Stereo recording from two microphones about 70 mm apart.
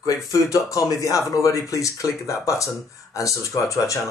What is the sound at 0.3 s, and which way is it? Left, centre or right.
Speech, left.